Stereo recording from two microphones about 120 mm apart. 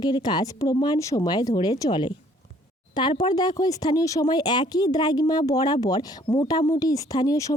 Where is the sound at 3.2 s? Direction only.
35° left (ahead or behind).